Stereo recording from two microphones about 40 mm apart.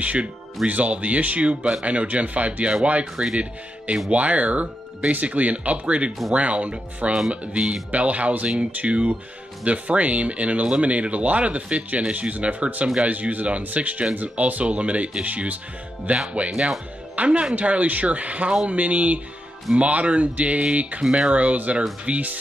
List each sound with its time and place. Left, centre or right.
0.0 s speech: right